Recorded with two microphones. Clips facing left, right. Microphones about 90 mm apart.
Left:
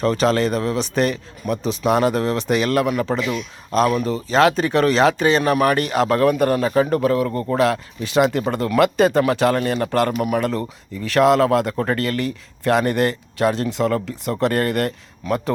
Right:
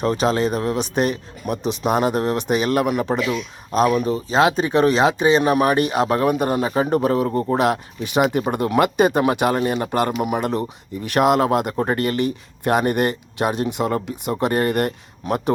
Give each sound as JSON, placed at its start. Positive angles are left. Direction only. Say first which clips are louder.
{"t": 0.0, "sound": "speech", "louder": "left 1 dB", "side_deg": -15}
{"t": 0.8, "sound": "speech", "louder": "left 1 dB", "side_deg": -45}
{"t": 1.9, "sound": "a man's voice", "louder": "left 1 dB", "side_deg": -10}
{"t": 3.2, "sound": "a man's voice", "louder": "right 1 dB", "side_deg": -5}